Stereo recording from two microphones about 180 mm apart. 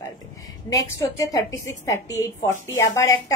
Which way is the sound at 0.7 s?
20° left (ahead or behind).